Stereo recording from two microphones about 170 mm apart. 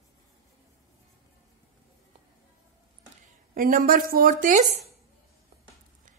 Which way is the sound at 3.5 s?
55° right (ahead or behind).